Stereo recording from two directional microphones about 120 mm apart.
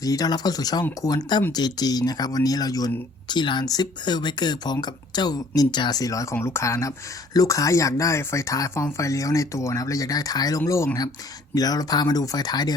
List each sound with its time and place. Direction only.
0.0 s speech: 30° left (ahead or behind)